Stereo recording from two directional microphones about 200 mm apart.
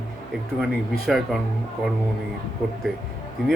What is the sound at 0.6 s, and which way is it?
Speech, centre (ahead or behind).